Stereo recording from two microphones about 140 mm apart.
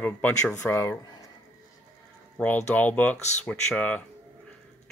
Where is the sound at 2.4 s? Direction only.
10° left (ahead or behind).